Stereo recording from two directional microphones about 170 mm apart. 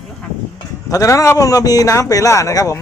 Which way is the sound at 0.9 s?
20° left (ahead or behind).